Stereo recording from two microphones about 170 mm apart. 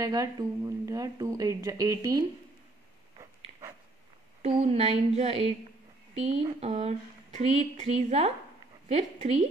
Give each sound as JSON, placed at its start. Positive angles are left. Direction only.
{"t": 0.0, "sound": "speech", "side_deg": -20}
{"t": 3.5, "sound": "dog", "side_deg": -30}
{"t": 4.4, "sound": "speech", "side_deg": -35}